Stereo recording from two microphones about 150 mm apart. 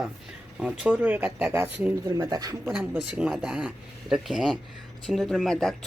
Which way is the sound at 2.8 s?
10° right (ahead or behind).